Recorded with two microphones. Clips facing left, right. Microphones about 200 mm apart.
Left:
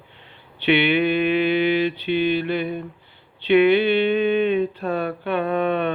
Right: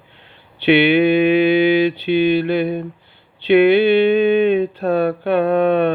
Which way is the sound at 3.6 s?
40° right (ahead or behind).